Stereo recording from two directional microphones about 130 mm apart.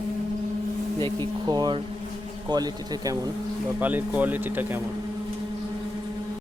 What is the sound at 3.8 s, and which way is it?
Speech, 15° right (ahead or behind).